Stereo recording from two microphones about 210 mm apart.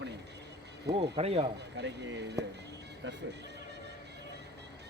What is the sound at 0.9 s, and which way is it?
Speech, 30° right (ahead or behind).